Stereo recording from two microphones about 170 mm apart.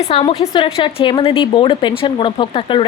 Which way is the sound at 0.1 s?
30° left (ahead or behind).